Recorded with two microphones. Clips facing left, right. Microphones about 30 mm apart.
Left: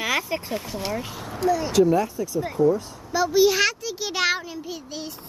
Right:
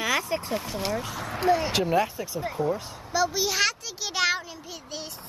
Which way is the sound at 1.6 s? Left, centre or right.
Right.